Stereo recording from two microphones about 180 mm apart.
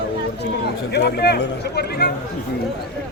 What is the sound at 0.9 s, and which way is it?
A man's voice, 65° left (ahead or behind).